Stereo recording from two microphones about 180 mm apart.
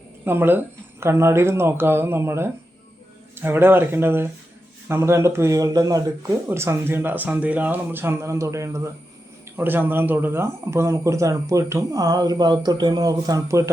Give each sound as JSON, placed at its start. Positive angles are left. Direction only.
{"t": 0.3, "sound": "speech", "side_deg": -10}